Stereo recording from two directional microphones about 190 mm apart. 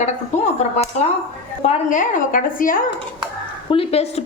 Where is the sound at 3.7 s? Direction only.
30° left (ahead or behind).